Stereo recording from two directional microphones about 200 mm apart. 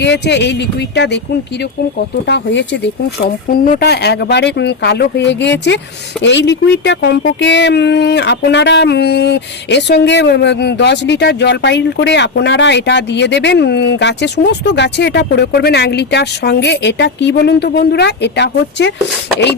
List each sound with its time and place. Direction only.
0.0 s speech: 60° left (ahead or behind)
2.2 s speech: 60° left (ahead or behind)
3.5 s speech: 45° left (ahead or behind)